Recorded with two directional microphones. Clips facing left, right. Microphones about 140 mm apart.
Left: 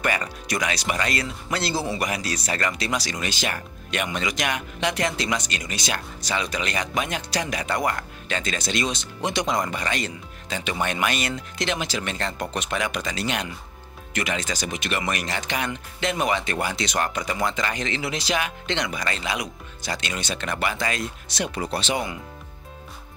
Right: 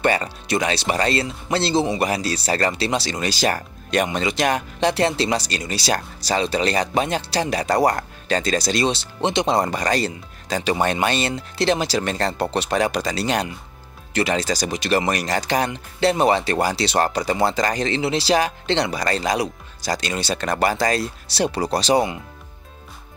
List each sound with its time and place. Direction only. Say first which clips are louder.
0.0 s speech: right 6 dB; 30° right (ahead or behind)